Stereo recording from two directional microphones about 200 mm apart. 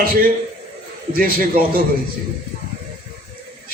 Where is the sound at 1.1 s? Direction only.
45° right (ahead or behind).